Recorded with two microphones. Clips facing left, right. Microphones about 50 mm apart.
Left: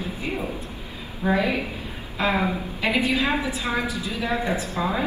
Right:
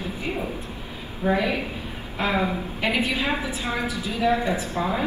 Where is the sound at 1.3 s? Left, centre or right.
Left.